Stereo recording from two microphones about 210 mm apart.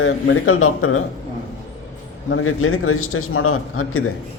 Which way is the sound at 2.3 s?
80° left.